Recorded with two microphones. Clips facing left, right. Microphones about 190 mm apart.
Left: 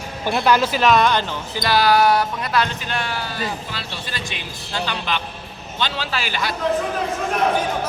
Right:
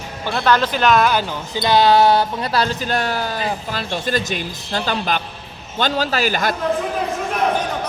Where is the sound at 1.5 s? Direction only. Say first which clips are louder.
Right 3 dB; 20° right (ahead or behind); by 6.5 s 45° right (ahead or behind).